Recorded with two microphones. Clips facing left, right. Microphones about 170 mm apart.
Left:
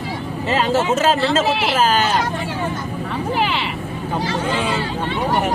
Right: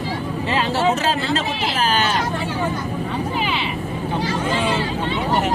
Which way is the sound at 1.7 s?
40° left (ahead or behind).